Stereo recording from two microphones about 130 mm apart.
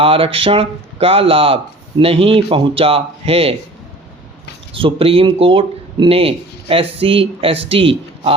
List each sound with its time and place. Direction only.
0.0 s speech: 45° right (ahead or behind)
4.7 s speech: 45° right (ahead or behind)